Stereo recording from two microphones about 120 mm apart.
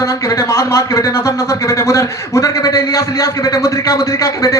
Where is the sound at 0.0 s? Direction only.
25° left (ahead or behind).